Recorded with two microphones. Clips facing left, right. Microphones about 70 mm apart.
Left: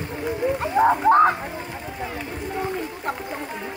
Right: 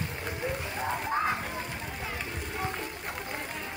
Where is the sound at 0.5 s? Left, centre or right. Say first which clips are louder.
Left 14 dB; left.